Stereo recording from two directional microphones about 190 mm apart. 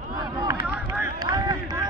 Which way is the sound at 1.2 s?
20° right (ahead or behind).